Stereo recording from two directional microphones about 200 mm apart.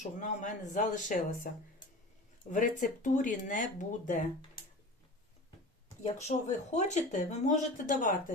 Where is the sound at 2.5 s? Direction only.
40° left (ahead or behind).